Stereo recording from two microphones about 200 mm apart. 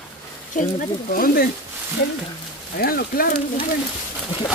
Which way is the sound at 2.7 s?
50° left (ahead or behind).